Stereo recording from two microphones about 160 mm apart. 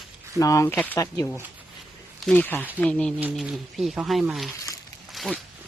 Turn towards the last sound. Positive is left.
turn(degrees=0)  # may be behind; listen again after turning